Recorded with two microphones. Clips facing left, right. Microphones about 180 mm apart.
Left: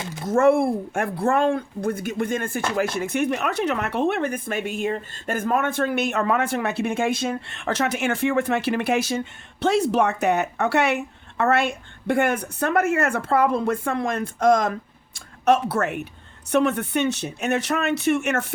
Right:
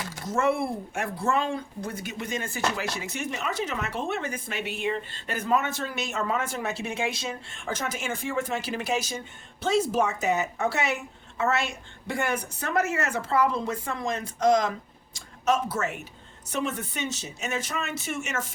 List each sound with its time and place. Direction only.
0.3 s speech: 50° left (ahead or behind)